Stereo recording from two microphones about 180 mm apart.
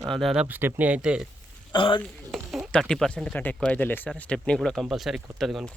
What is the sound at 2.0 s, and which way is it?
Speech, centre (ahead or behind).